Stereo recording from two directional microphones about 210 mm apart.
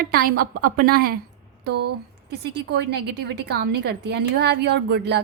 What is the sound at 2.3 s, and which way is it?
A woman's voice, 55° right (ahead or behind).